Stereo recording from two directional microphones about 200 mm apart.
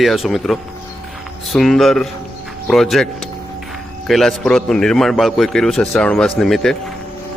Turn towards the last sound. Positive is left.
turn(degrees=0)  # may be behind; listen again after turning